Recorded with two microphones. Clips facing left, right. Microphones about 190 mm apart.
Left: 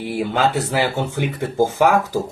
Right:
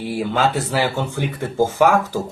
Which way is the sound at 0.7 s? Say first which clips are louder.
Even; 15° left (ahead or behind).